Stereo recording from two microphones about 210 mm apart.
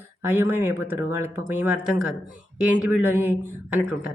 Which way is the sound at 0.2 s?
10° right (ahead or behind).